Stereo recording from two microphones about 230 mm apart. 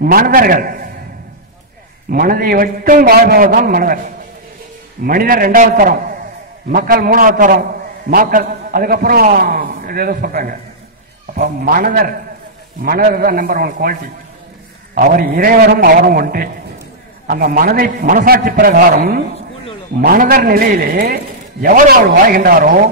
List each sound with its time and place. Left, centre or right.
0.0 s a man's voice: right
2.0 s a man's voice: right
15.0 s a man's voice: right